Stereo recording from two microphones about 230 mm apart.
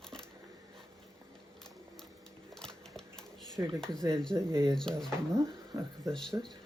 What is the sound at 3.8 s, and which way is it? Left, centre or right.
Speech, centre.